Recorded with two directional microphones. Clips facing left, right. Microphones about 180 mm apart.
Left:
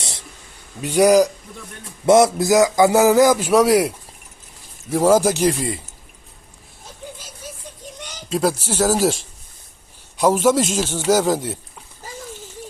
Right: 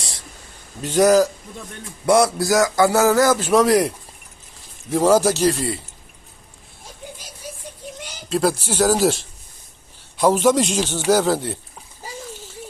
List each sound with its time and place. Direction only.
0.8 s a man's voice: 10° left (ahead or behind)
8.3 s a man's voice: 10° left (ahead or behind)